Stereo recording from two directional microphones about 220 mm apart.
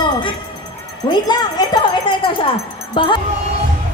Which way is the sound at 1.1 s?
20° left (ahead or behind).